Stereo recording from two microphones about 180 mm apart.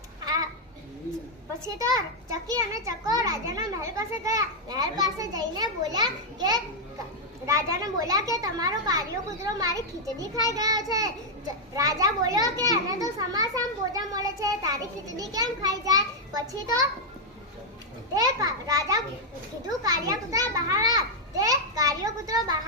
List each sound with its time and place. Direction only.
2.3 s a child's voice: 20° right (ahead or behind)
18.1 s a child's voice: 20° right (ahead or behind)